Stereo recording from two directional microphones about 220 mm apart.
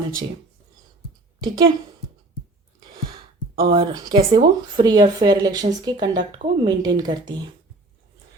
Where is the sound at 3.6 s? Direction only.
20° right (ahead or behind).